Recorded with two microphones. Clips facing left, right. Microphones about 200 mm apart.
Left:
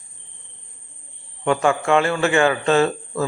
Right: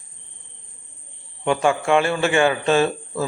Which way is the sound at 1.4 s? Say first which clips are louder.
Left 1 dB; 20° right (ahead or behind).